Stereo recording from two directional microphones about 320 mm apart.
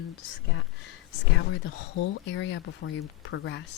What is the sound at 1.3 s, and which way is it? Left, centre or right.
Speech, left.